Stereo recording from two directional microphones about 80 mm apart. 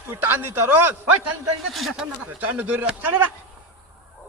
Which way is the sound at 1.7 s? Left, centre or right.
Centre.